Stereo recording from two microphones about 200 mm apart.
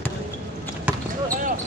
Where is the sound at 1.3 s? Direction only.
40° right (ahead or behind).